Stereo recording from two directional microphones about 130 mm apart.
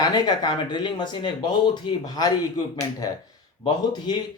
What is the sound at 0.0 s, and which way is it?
Speech, 30° left (ahead or behind).